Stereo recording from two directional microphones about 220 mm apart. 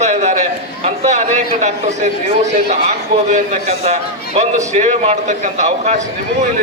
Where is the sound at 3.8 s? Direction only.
30° right (ahead or behind).